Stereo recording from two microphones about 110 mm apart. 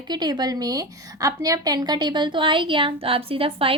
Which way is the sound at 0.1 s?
40° right (ahead or behind).